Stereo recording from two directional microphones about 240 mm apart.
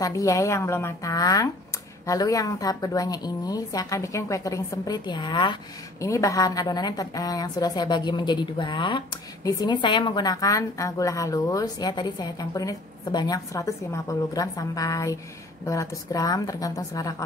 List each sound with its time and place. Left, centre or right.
0.0 s a woman's voice: centre